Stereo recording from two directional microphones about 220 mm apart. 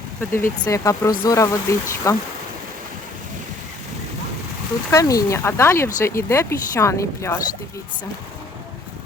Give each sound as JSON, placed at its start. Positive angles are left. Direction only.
{"t": 0.2, "sound": "speech", "side_deg": 10}
{"t": 4.9, "sound": "speech", "side_deg": 15}